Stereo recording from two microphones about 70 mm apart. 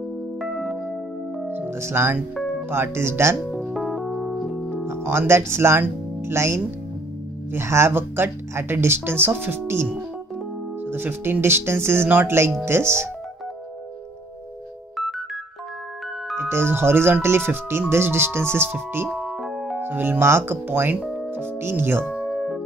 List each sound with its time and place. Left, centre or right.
0.4 s music: centre
1.5 s music: right
3.7 s music: centre
4.8 s speech: right
7.5 s music: right
10.9 s music: right
16.3 s music: right
19.0 s music: centre
19.8 s music: right
22.1 s music: centre